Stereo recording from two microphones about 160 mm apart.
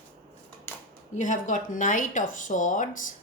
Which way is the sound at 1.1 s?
50° left (ahead or behind).